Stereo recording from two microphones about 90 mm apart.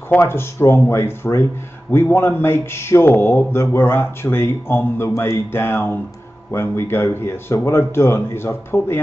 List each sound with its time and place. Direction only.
0.2 s speech: 25° left (ahead or behind)